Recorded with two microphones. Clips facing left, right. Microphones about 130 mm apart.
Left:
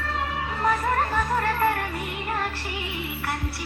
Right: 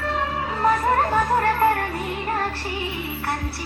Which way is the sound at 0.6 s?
30° right (ahead or behind).